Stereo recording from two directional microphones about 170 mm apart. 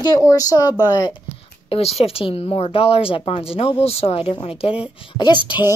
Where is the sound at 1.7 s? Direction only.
35° left (ahead or behind).